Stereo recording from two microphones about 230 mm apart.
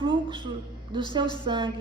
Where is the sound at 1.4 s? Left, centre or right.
Centre.